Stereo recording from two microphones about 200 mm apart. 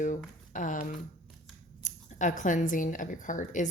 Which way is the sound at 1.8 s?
40° left (ahead or behind).